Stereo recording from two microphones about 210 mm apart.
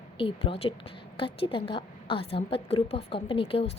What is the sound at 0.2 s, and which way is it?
A woman's voice, 25° left (ahead or behind).